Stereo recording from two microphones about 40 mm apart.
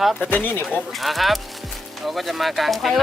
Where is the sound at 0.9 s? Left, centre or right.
Centre.